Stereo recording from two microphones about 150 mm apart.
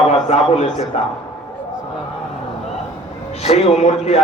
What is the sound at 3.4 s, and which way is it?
Speech, 45° left (ahead or behind).